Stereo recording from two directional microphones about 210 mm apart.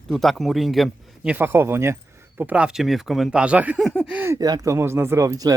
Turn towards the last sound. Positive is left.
turn(degrees=-15)  # may be behind; listen again after turning